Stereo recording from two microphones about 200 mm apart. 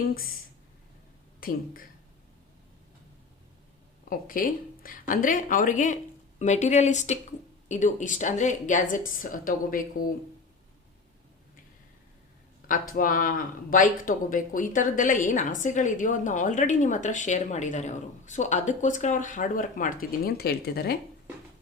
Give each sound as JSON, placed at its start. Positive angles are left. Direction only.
{"t": 1.4, "sound": "speech", "side_deg": 45}
{"t": 4.1, "sound": "speech", "side_deg": 45}
{"t": 12.9, "sound": "speech", "side_deg": 45}